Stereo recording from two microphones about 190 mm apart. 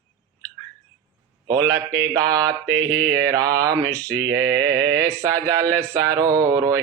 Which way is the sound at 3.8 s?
10° left (ahead or behind).